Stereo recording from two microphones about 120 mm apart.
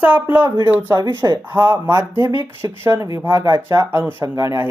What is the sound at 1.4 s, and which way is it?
Speech, 15° right (ahead or behind).